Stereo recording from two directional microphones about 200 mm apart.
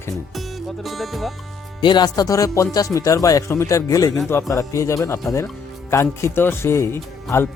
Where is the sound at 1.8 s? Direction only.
20° left (ahead or behind).